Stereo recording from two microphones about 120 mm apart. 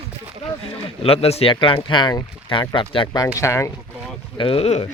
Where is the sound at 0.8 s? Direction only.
50° left (ahead or behind).